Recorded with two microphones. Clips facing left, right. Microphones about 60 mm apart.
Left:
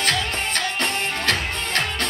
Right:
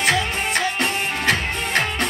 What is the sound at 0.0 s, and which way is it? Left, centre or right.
Music, centre.